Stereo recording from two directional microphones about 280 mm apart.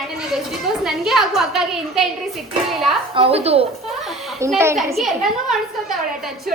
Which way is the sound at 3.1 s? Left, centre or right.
Right.